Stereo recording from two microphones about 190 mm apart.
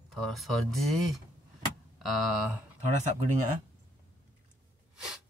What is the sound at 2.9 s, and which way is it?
Speech, 40° right (ahead or behind).